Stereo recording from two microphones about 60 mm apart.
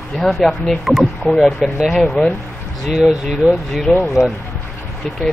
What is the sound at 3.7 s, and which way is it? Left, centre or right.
Speech, centre.